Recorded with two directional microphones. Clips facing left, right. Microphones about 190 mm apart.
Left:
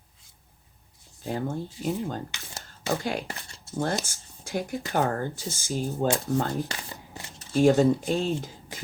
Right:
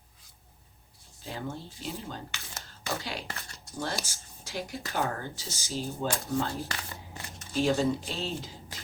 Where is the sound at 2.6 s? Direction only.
50° left (ahead or behind).